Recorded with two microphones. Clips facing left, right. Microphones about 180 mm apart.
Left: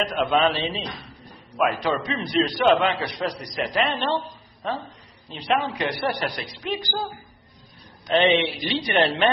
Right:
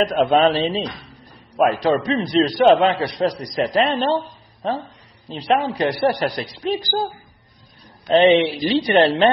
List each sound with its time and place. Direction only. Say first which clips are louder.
0.0 s a man's voice: right 6 dB; 40° right (ahead or behind)
8.1 s a man's voice: right 6 dB; 35° right (ahead or behind)